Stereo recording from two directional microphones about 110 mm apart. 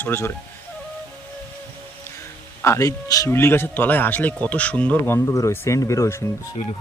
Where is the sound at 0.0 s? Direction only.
20° left (ahead or behind).